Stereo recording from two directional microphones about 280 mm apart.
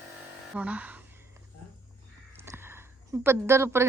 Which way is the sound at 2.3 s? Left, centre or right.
Centre.